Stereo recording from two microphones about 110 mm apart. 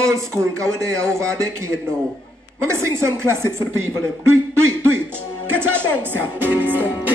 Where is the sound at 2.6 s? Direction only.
25° right (ahead or behind).